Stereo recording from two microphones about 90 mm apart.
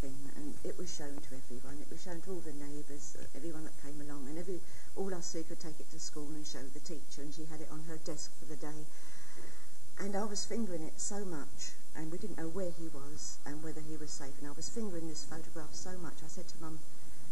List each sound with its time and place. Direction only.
0.6 s a woman's voice: 35° left (ahead or behind)
9.9 s a woman's voice: 40° left (ahead or behind)